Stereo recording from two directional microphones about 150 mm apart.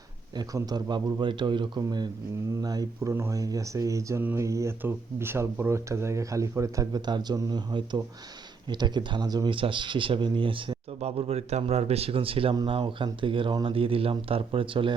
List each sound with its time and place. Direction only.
0.3 s speech: 25° right (ahead or behind)